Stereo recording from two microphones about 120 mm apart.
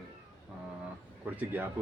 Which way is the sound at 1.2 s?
15° right (ahead or behind).